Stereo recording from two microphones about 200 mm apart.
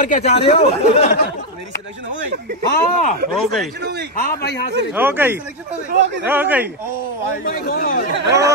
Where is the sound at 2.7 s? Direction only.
40° left (ahead or behind).